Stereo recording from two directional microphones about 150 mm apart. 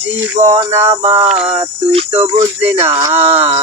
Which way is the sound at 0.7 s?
20° right (ahead or behind).